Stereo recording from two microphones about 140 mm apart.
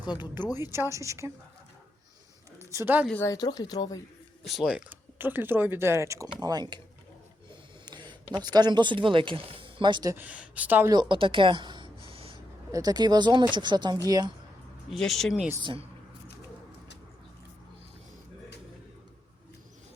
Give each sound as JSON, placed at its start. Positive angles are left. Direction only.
{"t": 0.0, "sound": "speech", "side_deg": 30}
{"t": 0.5, "sound": "a woman's voice", "side_deg": -15}
{"t": 2.6, "sound": "speech", "side_deg": -15}
{"t": 3.2, "sound": "speech", "side_deg": 30}
{"t": 4.4, "sound": "speech", "side_deg": 0}
{"t": 4.9, "sound": "speech", "side_deg": -15}
{"t": 7.9, "sound": "speech", "side_deg": -30}
{"t": 10.2, "sound": "speech", "side_deg": -10}
{"t": 11.1, "sound": "a sound", "side_deg": -35}
{"t": 12.7, "sound": "speech", "side_deg": -30}
{"t": 14.8, "sound": "speech", "side_deg": 0}